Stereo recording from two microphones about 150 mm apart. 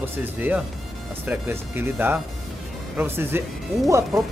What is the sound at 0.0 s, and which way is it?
Speech, 15° right (ahead or behind).